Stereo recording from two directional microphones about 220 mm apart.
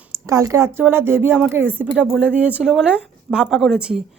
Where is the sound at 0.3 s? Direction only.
10° right (ahead or behind).